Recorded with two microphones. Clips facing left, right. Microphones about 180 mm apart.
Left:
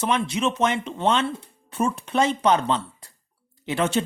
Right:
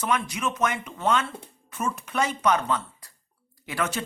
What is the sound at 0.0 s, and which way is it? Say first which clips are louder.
Speech: left 4 dB; 25° left (ahead or behind).